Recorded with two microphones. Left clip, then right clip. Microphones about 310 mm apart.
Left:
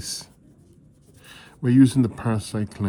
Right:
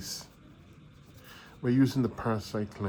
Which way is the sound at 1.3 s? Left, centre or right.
Left.